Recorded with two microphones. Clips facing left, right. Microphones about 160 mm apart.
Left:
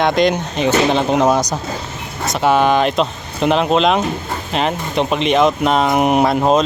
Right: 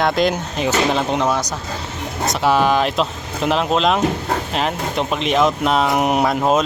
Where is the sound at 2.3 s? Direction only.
Centre (ahead or behind).